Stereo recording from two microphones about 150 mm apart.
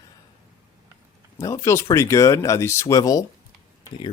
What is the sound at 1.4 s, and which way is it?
Speech, 20° left (ahead or behind).